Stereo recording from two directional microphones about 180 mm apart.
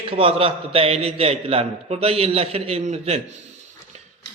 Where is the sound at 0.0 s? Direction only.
30° right (ahead or behind).